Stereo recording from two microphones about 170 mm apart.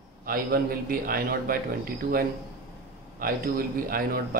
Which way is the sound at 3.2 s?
60° right (ahead or behind).